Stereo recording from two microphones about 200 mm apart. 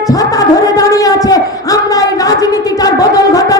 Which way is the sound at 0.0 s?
15° left (ahead or behind).